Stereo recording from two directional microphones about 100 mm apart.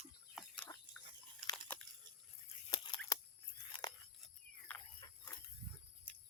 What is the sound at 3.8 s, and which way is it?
Biting, 45° left (ahead or behind).